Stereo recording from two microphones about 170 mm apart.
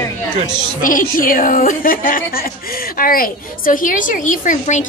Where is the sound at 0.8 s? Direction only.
50° left (ahead or behind).